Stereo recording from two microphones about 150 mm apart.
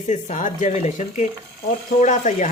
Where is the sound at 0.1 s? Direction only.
55° left (ahead or behind).